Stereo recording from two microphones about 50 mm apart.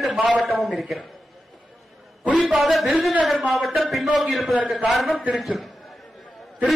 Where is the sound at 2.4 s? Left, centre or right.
Centre.